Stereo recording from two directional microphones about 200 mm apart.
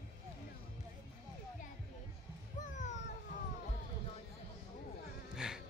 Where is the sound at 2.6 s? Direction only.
35° left (ahead or behind).